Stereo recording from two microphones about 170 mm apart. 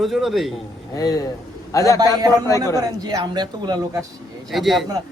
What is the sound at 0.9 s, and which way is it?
Speech, 20° left (ahead or behind).